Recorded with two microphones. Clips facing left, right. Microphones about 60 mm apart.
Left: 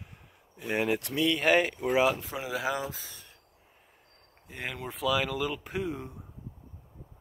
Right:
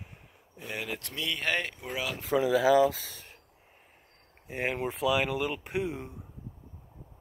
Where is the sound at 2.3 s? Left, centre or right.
Right.